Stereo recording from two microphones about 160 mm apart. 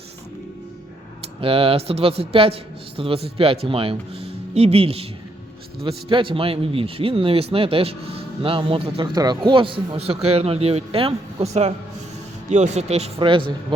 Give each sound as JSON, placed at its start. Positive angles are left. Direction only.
{"t": 1.4, "sound": "a man's voice", "side_deg": -35}
{"t": 6.1, "sound": "a man's voice", "side_deg": -30}